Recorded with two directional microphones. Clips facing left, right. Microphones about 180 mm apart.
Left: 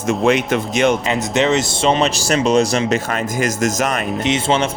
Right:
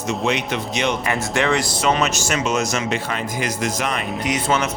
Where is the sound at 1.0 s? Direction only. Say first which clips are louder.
Left 4 dB; 20° left (ahead or behind); by 4.0 s 45° left (ahead or behind).